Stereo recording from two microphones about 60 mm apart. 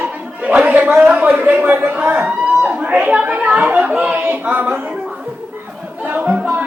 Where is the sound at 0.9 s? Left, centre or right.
Centre.